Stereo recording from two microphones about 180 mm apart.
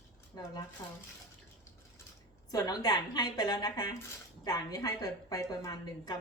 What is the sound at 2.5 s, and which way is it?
A woman's voice, 20° left (ahead or behind).